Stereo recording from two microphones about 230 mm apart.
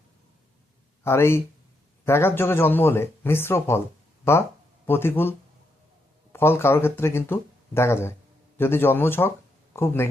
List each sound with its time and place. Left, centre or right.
1.0 s speech: centre
6.3 s speech: centre